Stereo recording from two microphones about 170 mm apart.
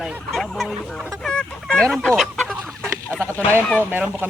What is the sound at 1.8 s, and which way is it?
Speech, 5° left (ahead or behind).